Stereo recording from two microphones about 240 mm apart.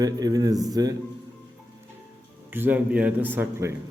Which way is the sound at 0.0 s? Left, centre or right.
Centre.